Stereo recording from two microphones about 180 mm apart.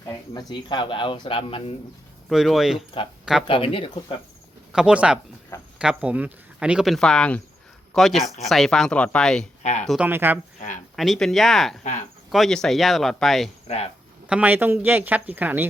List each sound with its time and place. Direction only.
0.0 s speech: 25° left (ahead or behind)
2.3 s speech: centre (ahead or behind)
2.7 s speech: 30° left (ahead or behind)
4.7 s speech: 5° right (ahead or behind)
10.1 s speech: 10° right (ahead or behind)
10.9 s speech: centre (ahead or behind)
13.7 s speech: 35° left (ahead or behind)
14.3 s speech: 10° right (ahead or behind)